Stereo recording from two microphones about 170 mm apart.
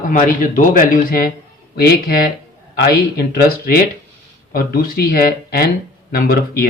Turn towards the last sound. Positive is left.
turn(degrees=65)  # may be behind; listen again after turning